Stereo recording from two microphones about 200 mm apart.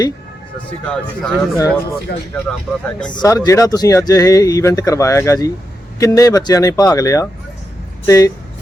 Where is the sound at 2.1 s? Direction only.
55° left (ahead or behind).